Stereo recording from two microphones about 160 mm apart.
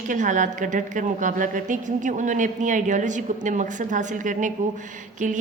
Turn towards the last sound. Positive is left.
turn(degrees=-55)  # may be behind; listen again after turning